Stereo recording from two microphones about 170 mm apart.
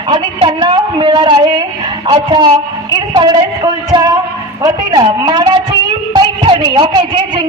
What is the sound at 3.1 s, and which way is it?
A woman's voice, 25° right (ahead or behind).